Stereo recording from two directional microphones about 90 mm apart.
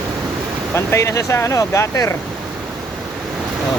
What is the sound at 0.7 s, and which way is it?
Speech, 30° left (ahead or behind).